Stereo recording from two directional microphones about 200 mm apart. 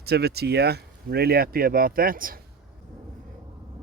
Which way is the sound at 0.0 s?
55° right (ahead or behind).